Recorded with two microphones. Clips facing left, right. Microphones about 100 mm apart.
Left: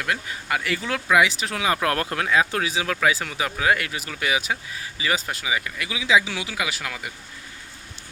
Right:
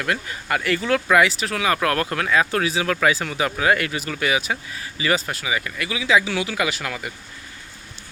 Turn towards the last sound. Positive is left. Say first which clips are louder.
# right 4 dB
turn(degrees=5)  # may be behind; listen again after turning